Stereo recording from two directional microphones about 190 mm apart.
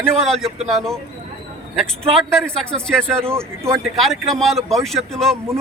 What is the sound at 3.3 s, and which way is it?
Speech, 15° right (ahead or behind).